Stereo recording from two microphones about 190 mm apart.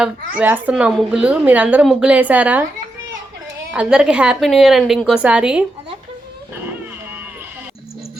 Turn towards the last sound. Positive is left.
turn(degrees=-10)  # may be behind; listen again after turning